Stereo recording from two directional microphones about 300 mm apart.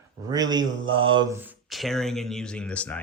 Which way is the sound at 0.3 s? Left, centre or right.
Centre.